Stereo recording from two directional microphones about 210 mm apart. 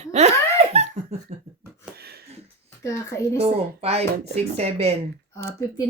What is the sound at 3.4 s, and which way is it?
Speech, 30° right (ahead or behind).